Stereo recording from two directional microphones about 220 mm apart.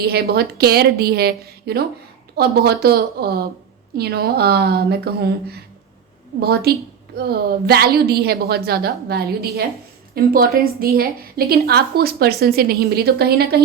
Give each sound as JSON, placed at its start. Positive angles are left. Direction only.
{"t": 0.0, "sound": "a woman's voice", "side_deg": -45}